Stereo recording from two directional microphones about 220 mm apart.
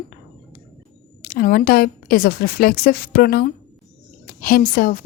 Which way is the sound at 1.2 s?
40° left (ahead or behind).